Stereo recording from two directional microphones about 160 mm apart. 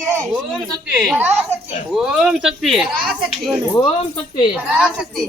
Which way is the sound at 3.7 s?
30° left (ahead or behind).